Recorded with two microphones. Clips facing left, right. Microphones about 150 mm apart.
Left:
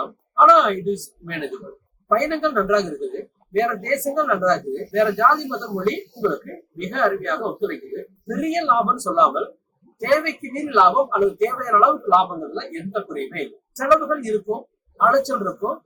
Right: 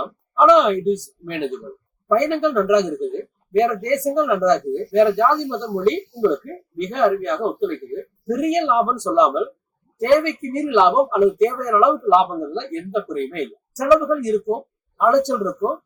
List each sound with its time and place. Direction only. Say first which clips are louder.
0.0 s a man's voice: right 1 dB; 20° right (ahead or behind)